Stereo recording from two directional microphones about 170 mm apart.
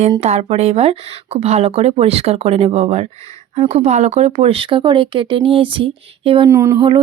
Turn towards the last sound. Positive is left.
turn(degrees=-30)  # may be behind; listen again after turning